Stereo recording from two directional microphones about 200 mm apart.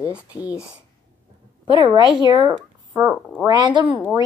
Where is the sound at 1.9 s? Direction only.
20° right (ahead or behind).